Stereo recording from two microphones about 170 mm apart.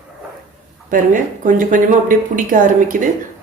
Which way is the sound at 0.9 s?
50° right (ahead or behind).